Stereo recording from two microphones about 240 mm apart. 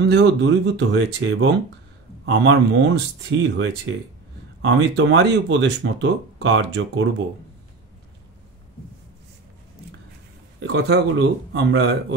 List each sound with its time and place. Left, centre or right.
0.0 s speech: right
10.6 s speech: right